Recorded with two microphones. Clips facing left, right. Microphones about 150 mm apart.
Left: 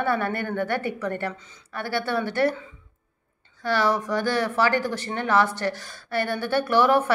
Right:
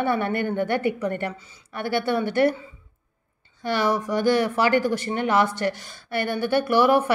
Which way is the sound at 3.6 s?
15° right (ahead or behind).